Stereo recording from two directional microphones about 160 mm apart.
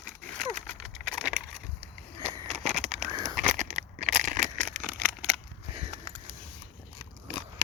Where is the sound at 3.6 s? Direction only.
50° right (ahead or behind).